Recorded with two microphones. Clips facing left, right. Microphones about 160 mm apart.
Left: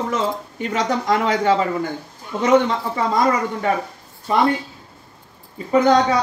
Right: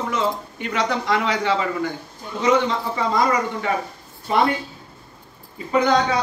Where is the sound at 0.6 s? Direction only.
45° left (ahead or behind).